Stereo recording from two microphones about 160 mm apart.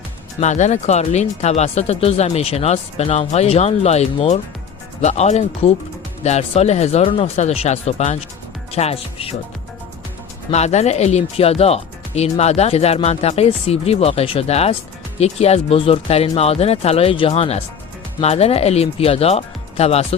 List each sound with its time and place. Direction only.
0.3 s speech: 45° left (ahead or behind)
10.5 s speech: 45° left (ahead or behind)